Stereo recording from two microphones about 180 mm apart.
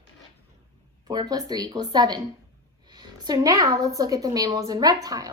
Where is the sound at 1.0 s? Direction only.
20° right (ahead or behind).